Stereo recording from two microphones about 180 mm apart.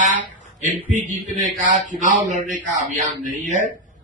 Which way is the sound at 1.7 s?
45° right (ahead or behind).